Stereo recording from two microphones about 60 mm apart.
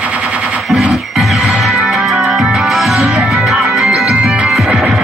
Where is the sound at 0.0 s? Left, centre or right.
Right.